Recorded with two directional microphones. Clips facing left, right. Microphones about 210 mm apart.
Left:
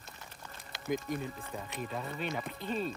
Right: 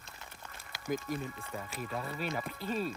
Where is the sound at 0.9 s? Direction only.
Centre (ahead or behind).